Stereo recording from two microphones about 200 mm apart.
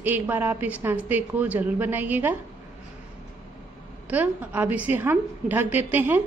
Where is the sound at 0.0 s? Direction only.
10° right (ahead or behind).